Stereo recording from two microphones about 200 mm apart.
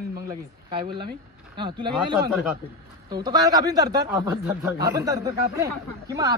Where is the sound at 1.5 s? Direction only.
25° right (ahead or behind).